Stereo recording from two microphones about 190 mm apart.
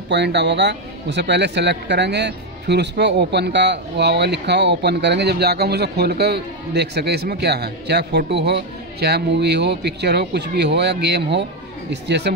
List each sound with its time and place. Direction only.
0.1 s a man's voice: 65° right (ahead or behind)